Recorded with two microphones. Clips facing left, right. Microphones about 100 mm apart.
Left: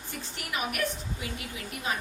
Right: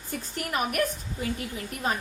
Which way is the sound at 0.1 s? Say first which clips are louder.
Right 5 dB; 45° right (ahead or behind).